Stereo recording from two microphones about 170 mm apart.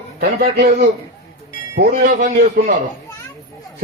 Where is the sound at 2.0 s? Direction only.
55° right (ahead or behind).